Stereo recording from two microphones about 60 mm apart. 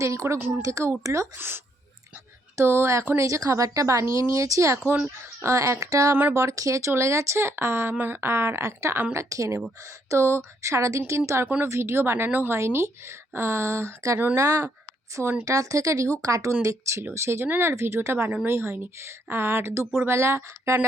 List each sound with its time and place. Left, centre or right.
0.0 s a woman's voice: right
1.4 s speech: right
3.2 s a woman's voice: right
5.2 s a woman's voice: right
6.1 s speech: right
6.3 s a woman's voice: right
7.9 s a woman's voice: right
12.5 s a woman's voice: right
15.1 s speech: right
15.4 s a woman's voice: right
17.4 s speech: right